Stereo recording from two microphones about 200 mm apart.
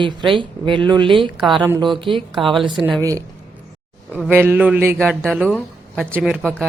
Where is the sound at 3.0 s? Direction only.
15° right (ahead or behind).